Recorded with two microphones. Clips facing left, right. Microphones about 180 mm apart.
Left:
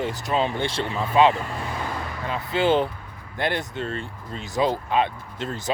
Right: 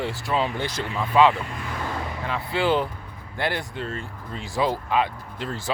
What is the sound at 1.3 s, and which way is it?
Speech, 40° left (ahead or behind).